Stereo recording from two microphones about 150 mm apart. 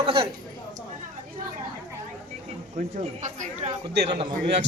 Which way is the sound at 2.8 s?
55° right (ahead or behind).